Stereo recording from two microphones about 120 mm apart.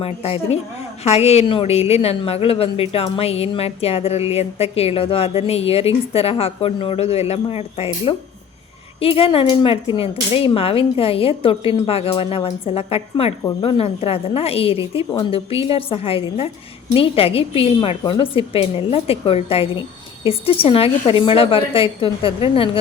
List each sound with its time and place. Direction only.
0.0 s a woman's voice: 55° left (ahead or behind)